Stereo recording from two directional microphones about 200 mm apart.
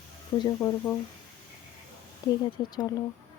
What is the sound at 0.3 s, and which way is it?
Speech, 15° left (ahead or behind).